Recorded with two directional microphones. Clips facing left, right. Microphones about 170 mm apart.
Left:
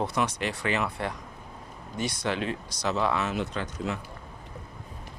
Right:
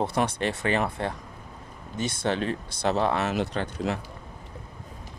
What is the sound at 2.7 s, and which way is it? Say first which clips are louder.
Speech: right 3 dB; 60° right (ahead or behind).